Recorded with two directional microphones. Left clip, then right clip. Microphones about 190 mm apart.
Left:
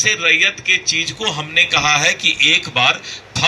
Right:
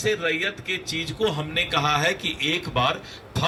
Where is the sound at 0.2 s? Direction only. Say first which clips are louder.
Left 11 dB; 50° right (ahead or behind).